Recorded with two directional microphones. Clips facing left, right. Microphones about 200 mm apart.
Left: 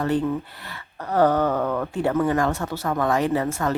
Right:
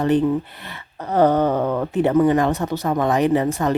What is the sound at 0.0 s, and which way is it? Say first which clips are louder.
Speech: right 5 dB; 20° right (ahead or behind).